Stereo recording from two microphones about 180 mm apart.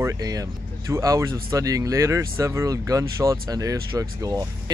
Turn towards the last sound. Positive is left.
turn(degrees=-20)  # may be behind; listen again after turning